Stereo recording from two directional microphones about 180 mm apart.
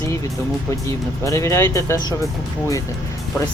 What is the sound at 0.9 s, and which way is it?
Speech, 15° left (ahead or behind).